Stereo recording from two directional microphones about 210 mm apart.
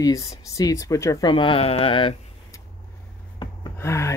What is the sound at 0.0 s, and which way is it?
Speech, 15° left (ahead or behind).